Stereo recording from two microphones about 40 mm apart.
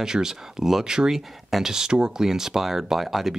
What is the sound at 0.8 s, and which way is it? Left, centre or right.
Speech, centre.